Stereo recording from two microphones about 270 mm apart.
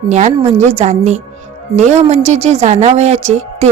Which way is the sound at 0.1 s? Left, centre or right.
Right.